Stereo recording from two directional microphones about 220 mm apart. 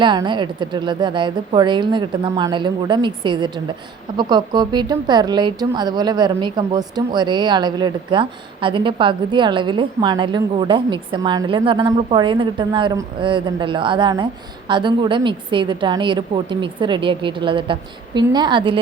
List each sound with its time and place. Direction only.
0.0 s speech: 20° right (ahead or behind)